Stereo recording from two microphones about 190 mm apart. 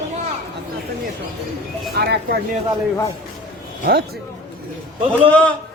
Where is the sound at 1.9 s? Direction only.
60° right (ahead or behind).